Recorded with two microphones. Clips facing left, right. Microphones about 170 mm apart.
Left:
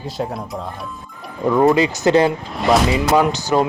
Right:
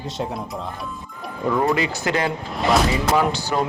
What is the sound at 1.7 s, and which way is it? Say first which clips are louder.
Speech: left 7 dB; 25° left (ahead or behind).